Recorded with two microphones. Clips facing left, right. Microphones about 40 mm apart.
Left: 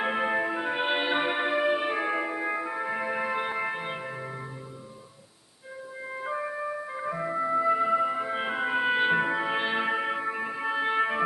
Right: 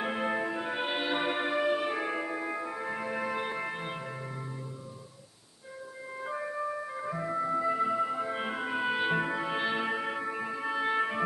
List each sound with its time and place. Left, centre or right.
0.0 s music: centre
6.1 s music: centre